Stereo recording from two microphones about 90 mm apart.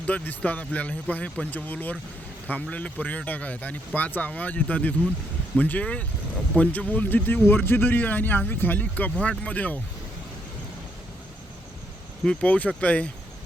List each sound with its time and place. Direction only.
0.1 s speech: 15° left (ahead or behind)
12.2 s speech: 10° left (ahead or behind)